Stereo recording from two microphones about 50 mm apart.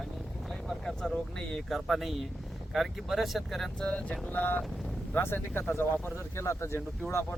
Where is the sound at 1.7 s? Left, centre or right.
Centre.